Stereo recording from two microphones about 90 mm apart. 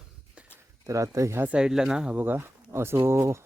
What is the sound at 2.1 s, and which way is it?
Speech, 20° right (ahead or behind).